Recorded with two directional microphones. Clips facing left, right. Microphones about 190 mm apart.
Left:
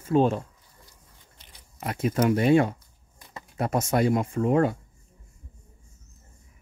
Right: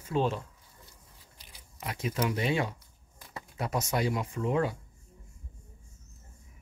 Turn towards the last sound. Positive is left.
turn(degrees=50)  # may be behind; listen again after turning